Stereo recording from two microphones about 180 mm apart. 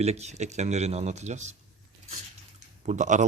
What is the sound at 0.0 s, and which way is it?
Speech, 35° right (ahead or behind).